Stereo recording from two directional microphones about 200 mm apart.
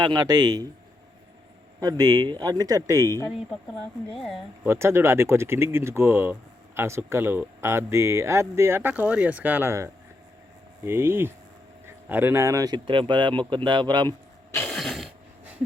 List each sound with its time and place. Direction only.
0.0 s speech: 20° right (ahead or behind)
1.8 s speech: 20° right (ahead or behind)
4.6 s speech: 15° right (ahead or behind)
14.7 s a sound: centre (ahead or behind)